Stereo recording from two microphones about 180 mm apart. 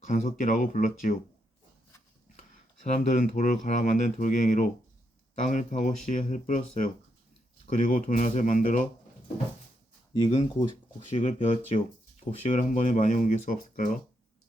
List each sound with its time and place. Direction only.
0.0 s speech: 45° left (ahead or behind)
2.8 s speech: 40° left (ahead or behind)
10.2 s speech: 35° left (ahead or behind)